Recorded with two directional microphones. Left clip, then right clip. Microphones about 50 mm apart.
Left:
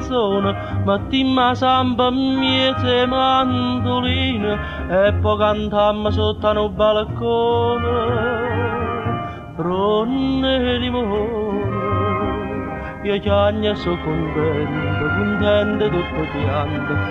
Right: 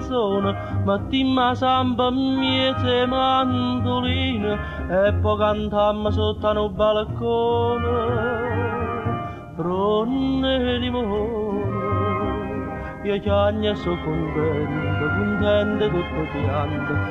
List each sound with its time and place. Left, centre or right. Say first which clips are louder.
0.1 s music: left 3 dB; left
13.0 s speech: left 3 dB; left